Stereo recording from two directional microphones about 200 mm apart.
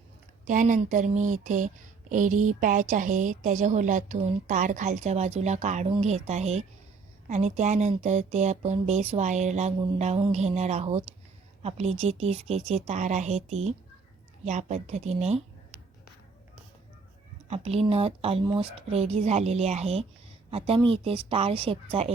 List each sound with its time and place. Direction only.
0.4 s speech: 40° right (ahead or behind)
17.5 s a woman's voice: 30° right (ahead or behind)